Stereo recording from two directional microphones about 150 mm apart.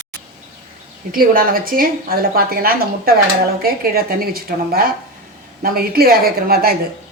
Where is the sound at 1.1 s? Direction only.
70° right (ahead or behind).